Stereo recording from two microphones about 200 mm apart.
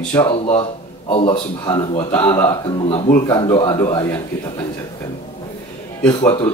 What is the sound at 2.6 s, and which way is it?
Speech, 30° left (ahead or behind).